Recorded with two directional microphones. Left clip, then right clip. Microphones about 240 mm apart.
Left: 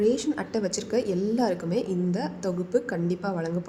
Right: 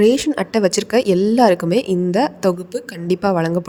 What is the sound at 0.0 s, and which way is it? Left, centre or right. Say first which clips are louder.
A woman's voice: right 10 dB; right.